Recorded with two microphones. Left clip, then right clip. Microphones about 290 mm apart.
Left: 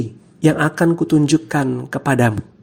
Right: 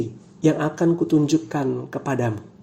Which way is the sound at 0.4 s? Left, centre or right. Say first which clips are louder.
Left 4 dB; left.